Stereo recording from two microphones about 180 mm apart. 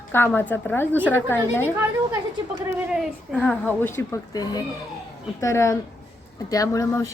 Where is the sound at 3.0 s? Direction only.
Centre (ahead or behind).